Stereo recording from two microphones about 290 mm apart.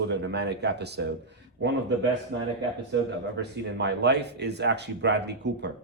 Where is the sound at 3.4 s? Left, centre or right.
Right.